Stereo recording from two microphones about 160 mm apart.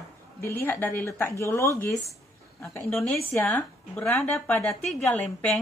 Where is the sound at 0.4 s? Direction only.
15° left (ahead or behind).